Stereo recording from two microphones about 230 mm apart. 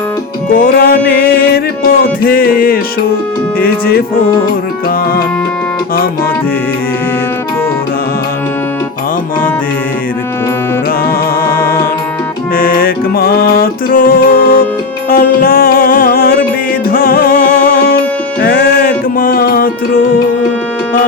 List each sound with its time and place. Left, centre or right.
0.5 s music: left
11.5 s music: centre
12.5 s music: left